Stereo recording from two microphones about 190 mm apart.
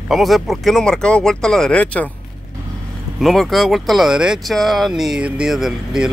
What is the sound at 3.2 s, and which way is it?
Speech, centre (ahead or behind).